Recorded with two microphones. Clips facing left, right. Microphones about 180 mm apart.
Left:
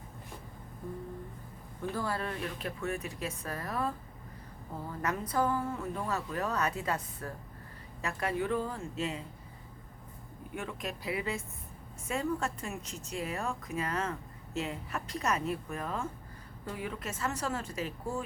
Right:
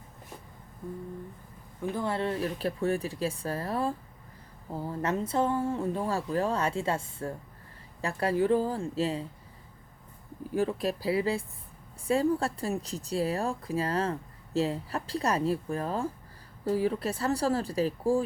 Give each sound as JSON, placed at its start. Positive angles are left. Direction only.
{"t": 1.9, "sound": "speech", "side_deg": -20}
{"t": 10.5, "sound": "speech", "side_deg": -35}